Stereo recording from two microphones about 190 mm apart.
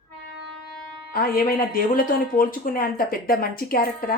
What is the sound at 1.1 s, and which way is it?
Speech, 50° left (ahead or behind).